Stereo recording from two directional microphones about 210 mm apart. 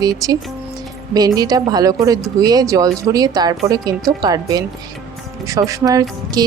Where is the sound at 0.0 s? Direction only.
15° right (ahead or behind).